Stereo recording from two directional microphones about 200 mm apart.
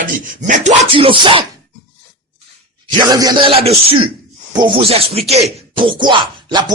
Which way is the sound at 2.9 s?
20° right (ahead or behind).